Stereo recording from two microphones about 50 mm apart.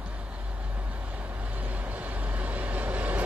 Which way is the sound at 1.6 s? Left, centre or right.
Right.